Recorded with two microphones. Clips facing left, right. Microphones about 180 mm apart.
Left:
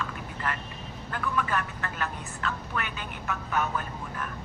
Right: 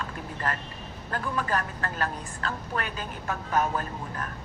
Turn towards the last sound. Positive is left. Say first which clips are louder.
# right 1 dB
turn(degrees=-40)  # may be behind; listen again after turning